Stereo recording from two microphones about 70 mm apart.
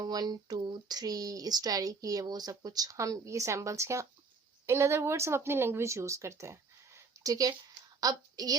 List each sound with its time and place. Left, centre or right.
0.0 s a woman's voice: right